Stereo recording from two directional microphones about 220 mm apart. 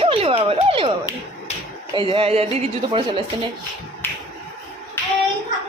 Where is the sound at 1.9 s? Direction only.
25° right (ahead or behind).